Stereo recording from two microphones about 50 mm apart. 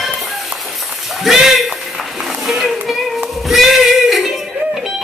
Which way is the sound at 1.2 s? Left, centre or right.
Centre.